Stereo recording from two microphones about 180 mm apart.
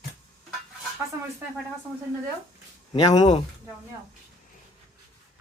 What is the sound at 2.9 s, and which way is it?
Speech, 25° left (ahead or behind).